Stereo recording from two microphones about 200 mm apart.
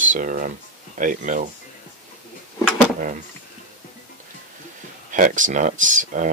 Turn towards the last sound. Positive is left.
turn(degrees=-40)  # may be behind; listen again after turning